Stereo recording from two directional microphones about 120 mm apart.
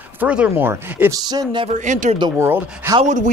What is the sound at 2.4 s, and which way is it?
Speech, 20° right (ahead or behind).